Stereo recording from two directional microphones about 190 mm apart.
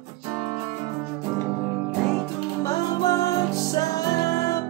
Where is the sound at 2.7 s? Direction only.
15° left (ahead or behind).